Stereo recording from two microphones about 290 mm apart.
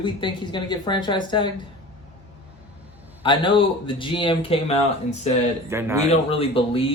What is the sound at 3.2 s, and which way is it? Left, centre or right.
Speech, centre.